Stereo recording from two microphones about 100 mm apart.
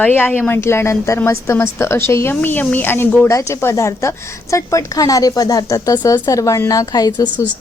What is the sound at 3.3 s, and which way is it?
A woman's voice, 30° left (ahead or behind).